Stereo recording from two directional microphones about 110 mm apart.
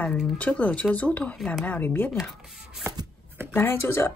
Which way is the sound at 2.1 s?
Centre (ahead or behind).